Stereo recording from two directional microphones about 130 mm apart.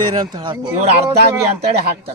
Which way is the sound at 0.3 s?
30° right (ahead or behind).